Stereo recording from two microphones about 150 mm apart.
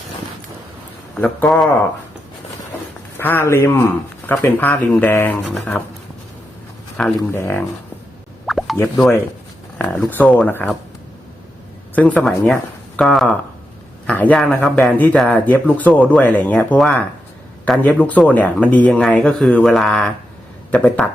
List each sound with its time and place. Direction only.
1.1 s a man's voice: 10° left (ahead or behind)
3.2 s a man's voice: 15° left (ahead or behind)
7.2 s speech: 15° left (ahead or behind)
8.4 s plop: centre (ahead or behind)
8.7 s speech: 20° left (ahead or behind)
11.9 s a man's voice: 5° left (ahead or behind)